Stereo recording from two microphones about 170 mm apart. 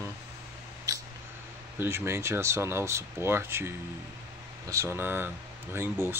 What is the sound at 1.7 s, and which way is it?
Speech, 15° right (ahead or behind).